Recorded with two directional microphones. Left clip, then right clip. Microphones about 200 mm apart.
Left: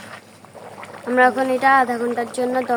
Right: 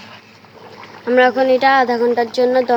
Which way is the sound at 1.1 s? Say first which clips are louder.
Right 4 dB; 15° right (ahead or behind).